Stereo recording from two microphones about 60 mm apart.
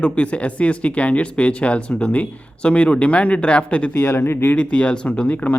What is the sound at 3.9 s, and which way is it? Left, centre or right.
Speech, left.